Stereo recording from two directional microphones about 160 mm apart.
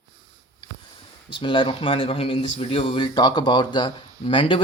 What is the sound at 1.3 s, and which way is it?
Speech, 30° left (ahead or behind).